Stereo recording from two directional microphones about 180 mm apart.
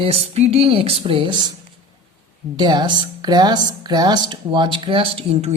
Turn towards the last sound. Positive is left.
turn(degrees=-30)  # may be behind; listen again after turning